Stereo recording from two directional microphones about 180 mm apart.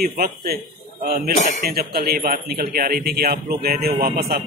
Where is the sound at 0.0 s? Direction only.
55° right (ahead or behind).